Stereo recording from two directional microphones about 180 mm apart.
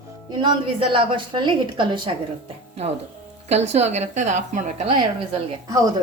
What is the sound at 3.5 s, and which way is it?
A woman's voice, 35° right (ahead or behind).